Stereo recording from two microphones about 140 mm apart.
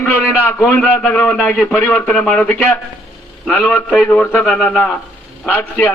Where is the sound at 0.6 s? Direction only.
10° left (ahead or behind).